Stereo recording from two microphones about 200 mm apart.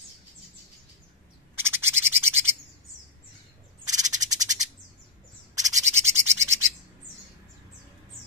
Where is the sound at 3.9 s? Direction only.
20° right (ahead or behind).